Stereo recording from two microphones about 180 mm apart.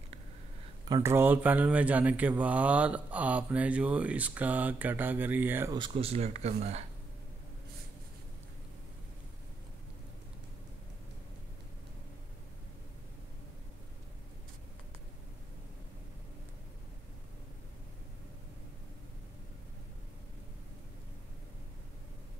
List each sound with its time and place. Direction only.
0.8 s speech: 20° right (ahead or behind)
5.8 s speech: 30° right (ahead or behind)